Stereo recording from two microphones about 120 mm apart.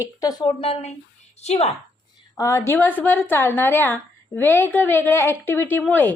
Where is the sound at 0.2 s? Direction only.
35° left (ahead or behind).